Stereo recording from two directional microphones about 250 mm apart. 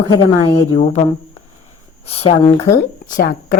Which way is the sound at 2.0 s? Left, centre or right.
Left.